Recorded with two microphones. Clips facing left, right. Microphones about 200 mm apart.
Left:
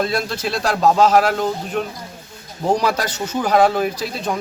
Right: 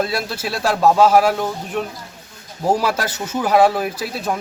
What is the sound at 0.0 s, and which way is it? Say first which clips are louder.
Speech: left 1 dB; 5° right (ahead or behind).